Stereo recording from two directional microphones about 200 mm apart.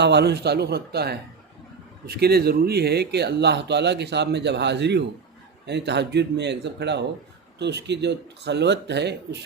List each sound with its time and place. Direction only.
0.0 s speech: 55° right (ahead or behind)